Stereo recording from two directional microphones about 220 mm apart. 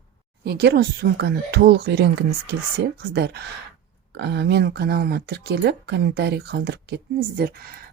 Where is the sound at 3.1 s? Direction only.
50° right (ahead or behind).